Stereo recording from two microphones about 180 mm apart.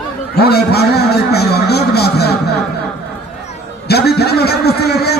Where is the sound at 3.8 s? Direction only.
65° left (ahead or behind).